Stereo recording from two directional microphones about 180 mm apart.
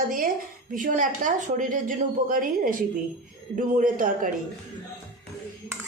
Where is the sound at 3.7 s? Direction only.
45° right (ahead or behind).